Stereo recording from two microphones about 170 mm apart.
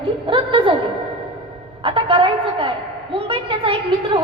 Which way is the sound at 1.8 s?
30° right (ahead or behind).